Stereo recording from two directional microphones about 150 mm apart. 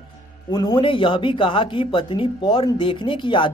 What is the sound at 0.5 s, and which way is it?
Speech, 25° left (ahead or behind).